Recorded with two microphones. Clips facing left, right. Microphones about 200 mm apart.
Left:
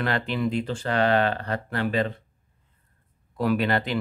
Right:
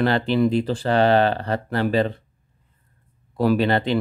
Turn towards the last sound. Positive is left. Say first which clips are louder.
# right 5 dB
turn(degrees=-30)  # may be behind; listen again after turning